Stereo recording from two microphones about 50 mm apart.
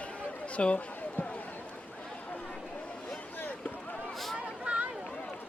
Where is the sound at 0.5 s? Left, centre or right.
Left.